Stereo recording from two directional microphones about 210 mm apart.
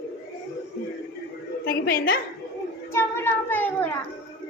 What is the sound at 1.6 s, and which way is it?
Speech, 45° left (ahead or behind).